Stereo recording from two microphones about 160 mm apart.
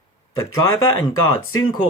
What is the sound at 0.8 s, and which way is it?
Speech, 30° left (ahead or behind).